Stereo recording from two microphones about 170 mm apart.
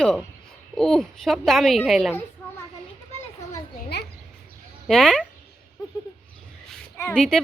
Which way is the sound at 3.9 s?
75° left (ahead or behind).